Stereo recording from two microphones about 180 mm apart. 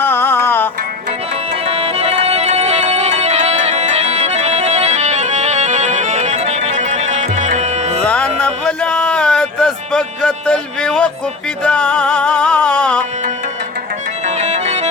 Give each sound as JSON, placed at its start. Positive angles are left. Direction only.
{"t": 0.0, "sound": "music", "side_deg": 10}
{"t": 1.6, "sound": "music", "side_deg": -35}
{"t": 8.0, "sound": "music", "side_deg": 5}
{"t": 14.3, "sound": "organ", "side_deg": -40}